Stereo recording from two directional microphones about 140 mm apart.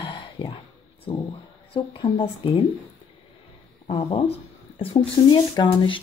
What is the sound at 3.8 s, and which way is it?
Speech, 40° left (ahead or behind).